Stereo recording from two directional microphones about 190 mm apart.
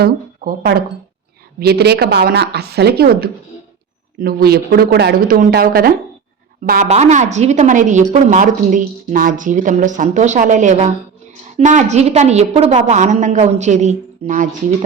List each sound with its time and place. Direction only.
0.0 s a woman's voice: 55° right (ahead or behind)
6.8 s a woman's voice: 35° right (ahead or behind)